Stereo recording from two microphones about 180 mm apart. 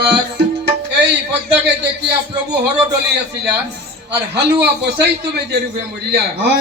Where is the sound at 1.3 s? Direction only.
70° right (ahead or behind).